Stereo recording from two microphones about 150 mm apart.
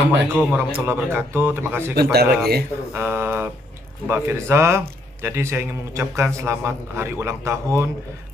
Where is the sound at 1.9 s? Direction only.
90° right.